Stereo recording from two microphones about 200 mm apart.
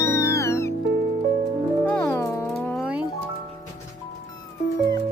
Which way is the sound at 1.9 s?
10° left (ahead or behind).